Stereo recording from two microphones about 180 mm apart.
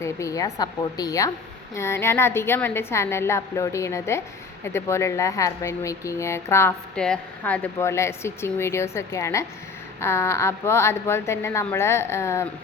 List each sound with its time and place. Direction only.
0.0 s a woman's voice: 15° left (ahead or behind)